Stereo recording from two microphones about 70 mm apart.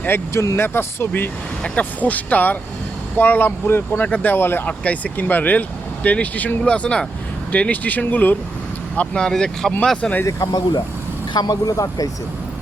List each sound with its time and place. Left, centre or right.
0.3 s speech: left
1.6 s speech: left
4.8 s speech: centre
9.0 s speech: centre
10.2 s speech: left
11.3 s speech: left